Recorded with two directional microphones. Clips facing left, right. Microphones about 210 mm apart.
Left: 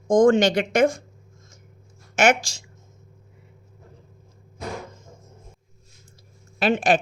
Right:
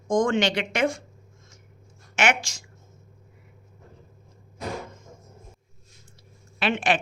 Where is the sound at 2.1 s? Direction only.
40° left (ahead or behind).